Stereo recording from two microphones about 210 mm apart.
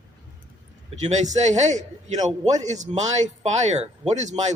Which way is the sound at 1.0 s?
35° right (ahead or behind).